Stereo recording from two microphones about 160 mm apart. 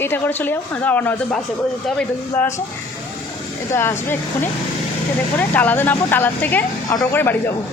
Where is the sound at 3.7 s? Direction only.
15° left (ahead or behind).